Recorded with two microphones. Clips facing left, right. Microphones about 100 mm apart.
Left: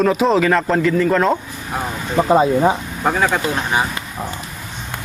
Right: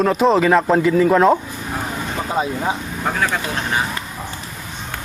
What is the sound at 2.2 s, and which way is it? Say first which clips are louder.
Speech: left 10 dB; 30° left (ahead or behind).